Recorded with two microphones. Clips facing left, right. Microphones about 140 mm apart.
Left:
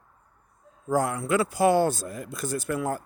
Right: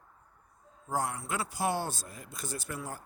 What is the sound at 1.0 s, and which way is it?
Speech, 70° left (ahead or behind).